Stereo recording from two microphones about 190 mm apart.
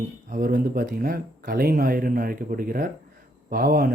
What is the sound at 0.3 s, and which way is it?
Speech, 45° right (ahead or behind).